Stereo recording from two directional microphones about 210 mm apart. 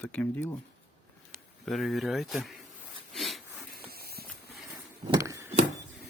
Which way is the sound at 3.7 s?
45° right (ahead or behind).